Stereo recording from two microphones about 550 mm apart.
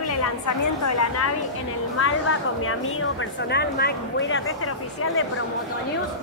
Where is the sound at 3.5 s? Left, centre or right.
Centre.